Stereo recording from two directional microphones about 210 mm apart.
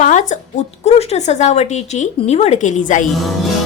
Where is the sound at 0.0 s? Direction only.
35° left (ahead or behind).